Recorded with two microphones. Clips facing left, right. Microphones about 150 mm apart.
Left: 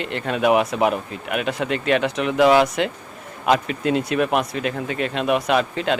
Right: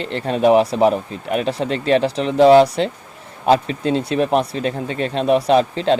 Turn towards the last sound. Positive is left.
turn(degrees=-30)  # may be behind; listen again after turning